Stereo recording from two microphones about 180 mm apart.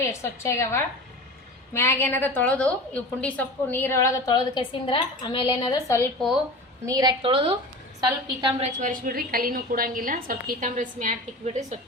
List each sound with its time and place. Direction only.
0.0 s a woman's voice: 15° left (ahead or behind)
6.8 s a woman's voice: 20° right (ahead or behind)
8.8 s a woman's voice: 50° right (ahead or behind)